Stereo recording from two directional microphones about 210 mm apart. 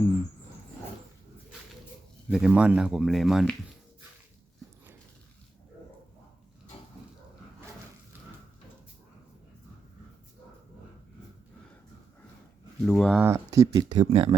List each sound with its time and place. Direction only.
2.3 s speech: 5° right (ahead or behind)
12.8 s speech: centre (ahead or behind)
13.2 s speech: 15° right (ahead or behind)
14.0 s speech: 25° right (ahead or behind)